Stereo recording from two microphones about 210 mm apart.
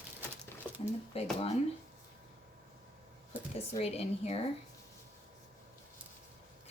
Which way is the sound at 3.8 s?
30° left (ahead or behind).